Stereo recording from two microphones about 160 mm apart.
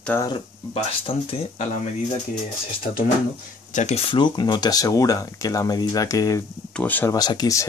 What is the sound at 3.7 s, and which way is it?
Speech, 45° left (ahead or behind).